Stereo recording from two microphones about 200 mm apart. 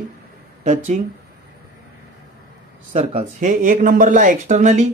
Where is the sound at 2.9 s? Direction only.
30° right (ahead or behind).